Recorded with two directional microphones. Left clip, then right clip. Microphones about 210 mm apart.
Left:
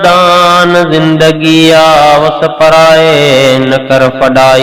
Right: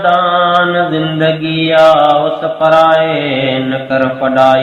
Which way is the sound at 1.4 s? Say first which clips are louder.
Left 8 dB; 45° left (ahead or behind).